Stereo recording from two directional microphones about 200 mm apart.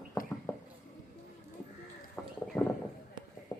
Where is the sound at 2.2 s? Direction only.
5° left (ahead or behind).